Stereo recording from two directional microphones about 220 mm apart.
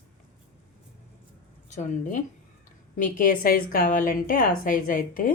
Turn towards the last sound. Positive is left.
turn(degrees=40)  # may be behind; listen again after turning